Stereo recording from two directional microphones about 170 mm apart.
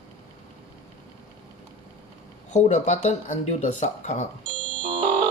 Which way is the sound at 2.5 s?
45° left (ahead or behind).